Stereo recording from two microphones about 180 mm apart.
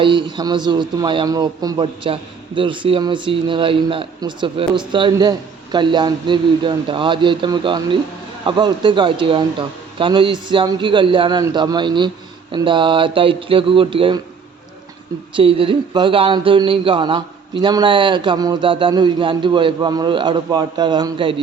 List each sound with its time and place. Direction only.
0.0 s speech: 25° right (ahead or behind)
15.4 s speech: 30° right (ahead or behind)